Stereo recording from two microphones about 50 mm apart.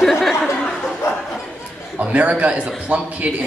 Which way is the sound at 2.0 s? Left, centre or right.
Right.